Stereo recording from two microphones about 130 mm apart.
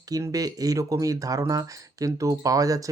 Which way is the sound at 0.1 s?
25° right (ahead or behind).